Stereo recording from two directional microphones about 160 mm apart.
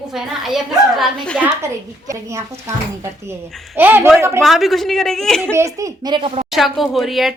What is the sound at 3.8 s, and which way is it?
Speech, 10° right (ahead or behind).